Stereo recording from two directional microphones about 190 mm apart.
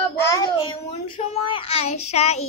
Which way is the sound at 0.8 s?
30° left (ahead or behind).